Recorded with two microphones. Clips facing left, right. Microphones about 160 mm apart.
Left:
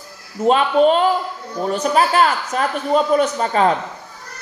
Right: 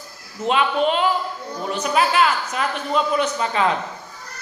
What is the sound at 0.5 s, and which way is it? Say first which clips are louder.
Speech: left 6 dB; 40° left (ahead or behind).